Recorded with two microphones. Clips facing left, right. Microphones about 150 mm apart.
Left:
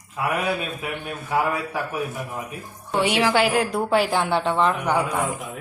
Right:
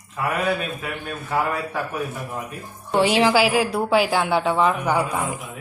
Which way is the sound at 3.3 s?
Centre (ahead or behind).